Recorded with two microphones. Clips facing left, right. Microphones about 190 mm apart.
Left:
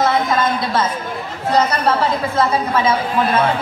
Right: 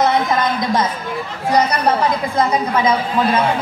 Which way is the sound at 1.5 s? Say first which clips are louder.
Even; 15° right (ahead or behind).